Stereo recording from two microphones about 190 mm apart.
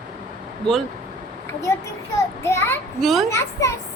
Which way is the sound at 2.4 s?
15° left (ahead or behind).